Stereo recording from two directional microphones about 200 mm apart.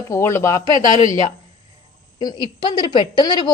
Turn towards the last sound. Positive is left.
turn(degrees=20)  # may be behind; listen again after turning